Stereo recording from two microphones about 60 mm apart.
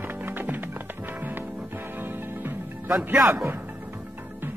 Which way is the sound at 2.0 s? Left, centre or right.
Right.